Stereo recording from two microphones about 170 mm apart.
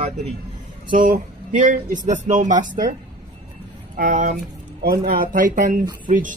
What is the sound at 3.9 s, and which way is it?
Speech, 50° right (ahead or behind).